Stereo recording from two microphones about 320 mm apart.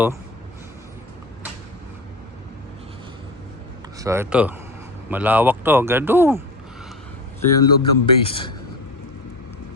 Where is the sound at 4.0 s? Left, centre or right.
Centre.